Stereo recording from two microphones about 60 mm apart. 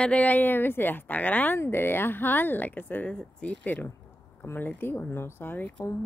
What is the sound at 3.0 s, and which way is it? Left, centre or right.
A woman's voice, left.